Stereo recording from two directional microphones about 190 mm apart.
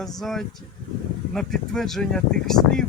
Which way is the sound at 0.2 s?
Centre (ahead or behind).